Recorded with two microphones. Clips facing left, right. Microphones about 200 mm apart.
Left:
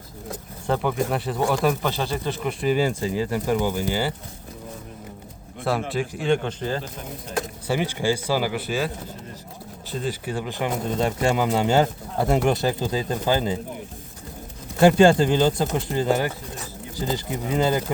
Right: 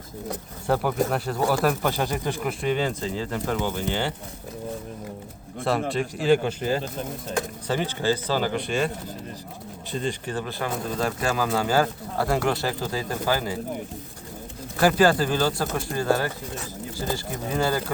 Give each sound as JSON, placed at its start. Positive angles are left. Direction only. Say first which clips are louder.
{"t": 0.7, "sound": "speech", "louder": "even", "side_deg": -5}
{"t": 2.5, "sound": "speech", "louder": "left 4 dB", "side_deg": 0}
{"t": 5.9, "sound": "speech", "louder": "right 4 dB", "side_deg": 0}
{"t": 7.7, "sound": "speech", "louder": "left 1 dB", "side_deg": 15}
{"t": 9.9, "sound": "speech", "louder": "left 1 dB", "side_deg": 5}
{"t": 14.8, "sound": "speech", "louder": "left 4 dB", "side_deg": 25}